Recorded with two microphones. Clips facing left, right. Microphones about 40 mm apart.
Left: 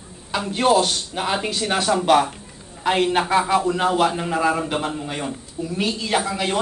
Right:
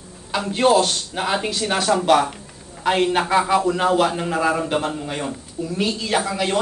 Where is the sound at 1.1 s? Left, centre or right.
Centre.